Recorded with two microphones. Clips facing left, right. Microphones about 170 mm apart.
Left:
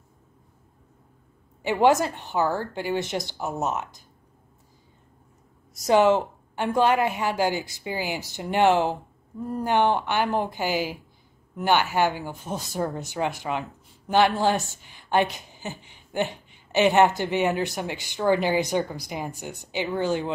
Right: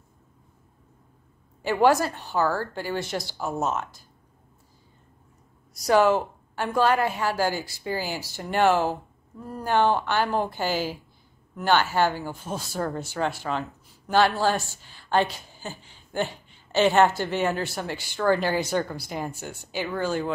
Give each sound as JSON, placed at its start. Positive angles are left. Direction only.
{"t": 1.6, "sound": "speech", "side_deg": 20}
{"t": 5.9, "sound": "speech", "side_deg": 20}